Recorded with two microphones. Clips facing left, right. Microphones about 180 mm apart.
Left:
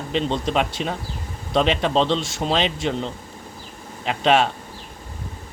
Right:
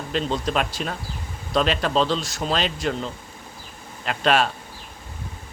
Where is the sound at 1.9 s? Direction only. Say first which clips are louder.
Left 2 dB; 25° left (ahead or behind).